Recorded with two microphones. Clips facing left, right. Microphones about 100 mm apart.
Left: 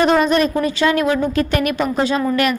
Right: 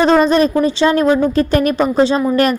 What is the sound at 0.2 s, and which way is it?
A woman's voice, 35° right (ahead or behind).